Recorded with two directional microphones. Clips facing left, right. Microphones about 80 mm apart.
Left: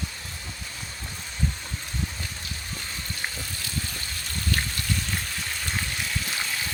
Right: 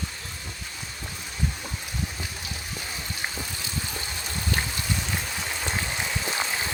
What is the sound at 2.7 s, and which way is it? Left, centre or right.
Vehicle, centre.